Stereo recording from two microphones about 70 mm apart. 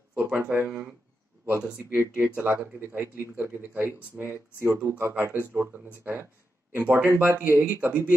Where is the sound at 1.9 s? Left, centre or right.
Right.